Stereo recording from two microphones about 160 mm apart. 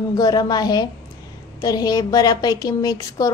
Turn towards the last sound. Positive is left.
turn(degrees=25)  # may be behind; listen again after turning